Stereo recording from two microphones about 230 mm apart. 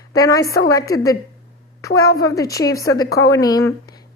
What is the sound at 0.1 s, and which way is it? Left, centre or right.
A woman's voice, centre.